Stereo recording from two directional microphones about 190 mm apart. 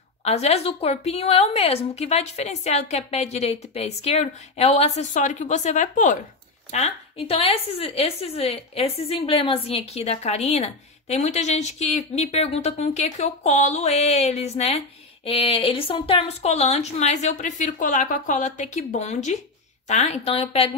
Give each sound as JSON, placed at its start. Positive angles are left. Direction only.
{"t": 0.2, "sound": "a woman's voice", "side_deg": 35}